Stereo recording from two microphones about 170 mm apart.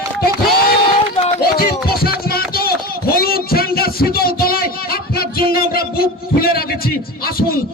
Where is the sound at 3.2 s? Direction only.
60° left (ahead or behind).